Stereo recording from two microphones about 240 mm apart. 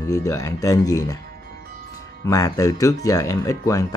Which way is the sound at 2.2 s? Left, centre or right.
Centre.